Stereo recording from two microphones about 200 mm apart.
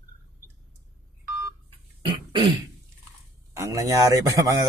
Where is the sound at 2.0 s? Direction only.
25° right (ahead or behind).